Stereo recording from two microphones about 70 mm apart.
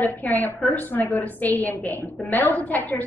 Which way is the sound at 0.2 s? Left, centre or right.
Centre.